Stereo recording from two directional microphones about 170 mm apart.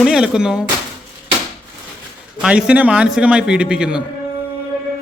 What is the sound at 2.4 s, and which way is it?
A man's voice, 5° right (ahead or behind).